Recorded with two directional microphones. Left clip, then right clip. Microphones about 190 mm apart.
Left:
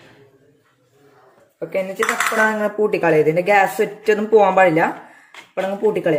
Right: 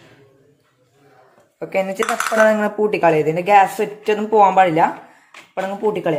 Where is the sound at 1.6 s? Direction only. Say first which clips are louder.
Right 1 dB; 25° right (ahead or behind); by 4.9 s centre (ahead or behind).